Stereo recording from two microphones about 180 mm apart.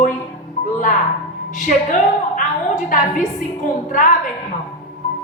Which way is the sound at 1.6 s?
45° left (ahead or behind).